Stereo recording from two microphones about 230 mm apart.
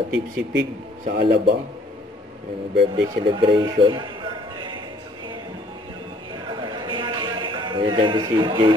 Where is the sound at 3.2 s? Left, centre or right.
Right.